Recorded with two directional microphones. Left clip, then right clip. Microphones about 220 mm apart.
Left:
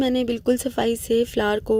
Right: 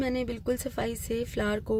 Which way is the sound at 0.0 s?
30° left (ahead or behind).